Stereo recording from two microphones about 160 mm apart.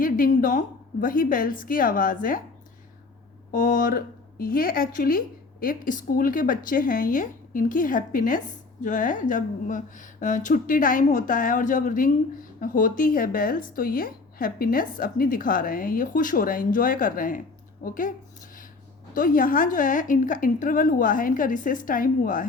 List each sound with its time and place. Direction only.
0.0 s a woman's voice: 60° left (ahead or behind)
3.5 s a woman's voice: 55° left (ahead or behind)
19.1 s a woman's voice: 60° left (ahead or behind)